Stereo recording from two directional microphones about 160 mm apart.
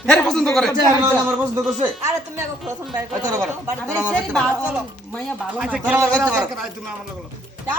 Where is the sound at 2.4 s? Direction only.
15° right (ahead or behind).